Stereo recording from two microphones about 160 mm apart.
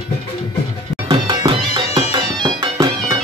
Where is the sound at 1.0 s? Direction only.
30° right (ahead or behind).